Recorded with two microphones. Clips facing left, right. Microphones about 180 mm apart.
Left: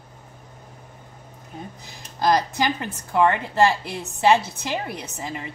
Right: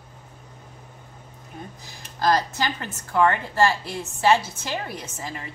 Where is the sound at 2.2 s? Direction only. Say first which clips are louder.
Left 2 dB; 15° left (ahead or behind).